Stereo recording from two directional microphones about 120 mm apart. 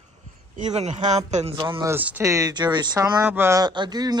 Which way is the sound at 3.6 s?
35° right (ahead or behind).